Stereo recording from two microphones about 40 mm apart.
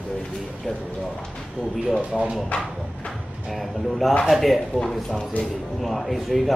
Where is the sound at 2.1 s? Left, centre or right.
Right.